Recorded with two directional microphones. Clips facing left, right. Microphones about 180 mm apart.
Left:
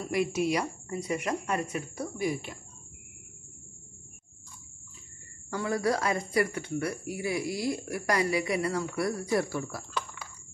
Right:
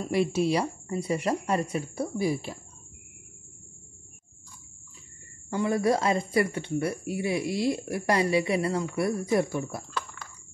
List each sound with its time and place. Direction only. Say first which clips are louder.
0.0 s speech: right 3 dB; 30° right (ahead or behind)
5.5 s speech: right 4 dB; 25° right (ahead or behind)